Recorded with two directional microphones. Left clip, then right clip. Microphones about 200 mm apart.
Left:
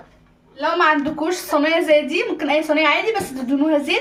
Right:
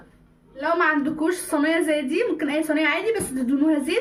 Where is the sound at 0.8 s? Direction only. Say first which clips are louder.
Left 6 dB; 10° right (ahead or behind).